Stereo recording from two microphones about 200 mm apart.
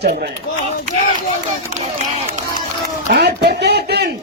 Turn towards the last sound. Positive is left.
turn(degrees=-55)  # may be behind; listen again after turning